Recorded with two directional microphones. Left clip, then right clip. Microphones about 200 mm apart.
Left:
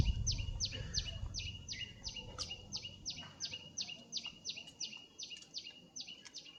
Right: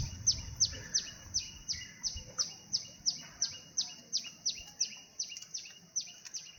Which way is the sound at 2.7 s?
55° left (ahead or behind).